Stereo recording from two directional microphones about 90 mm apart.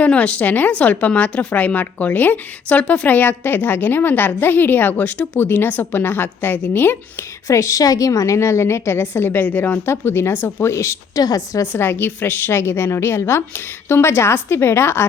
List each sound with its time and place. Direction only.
0.0 s a woman's voice: 15° left (ahead or behind)
7.4 s a woman's voice: 35° left (ahead or behind)
11.6 s a woman's voice: 25° left (ahead or behind)